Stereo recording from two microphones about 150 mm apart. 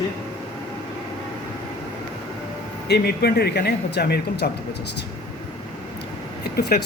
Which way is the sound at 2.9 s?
90° left.